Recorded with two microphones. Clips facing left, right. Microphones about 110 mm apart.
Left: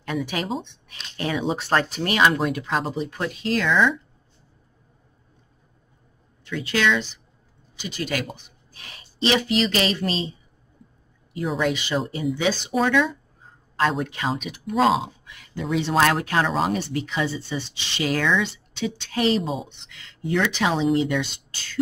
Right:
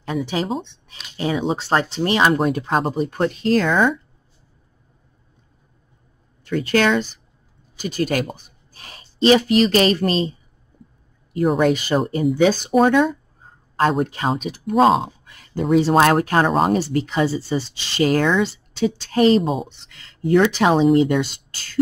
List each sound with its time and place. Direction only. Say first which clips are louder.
0.0 s speech: right 4 dB; 25° right (ahead or behind)
0.9 s a sound: right 1 dB; 10° right (ahead or behind)
1.5 s speech: right 2 dB; 30° right (ahead or behind); by 3.9 s 45° right (ahead or behind)
6.4 s speech: right 5 dB; 45° right (ahead or behind)
11.3 s speech: right 7 dB; 50° right (ahead or behind)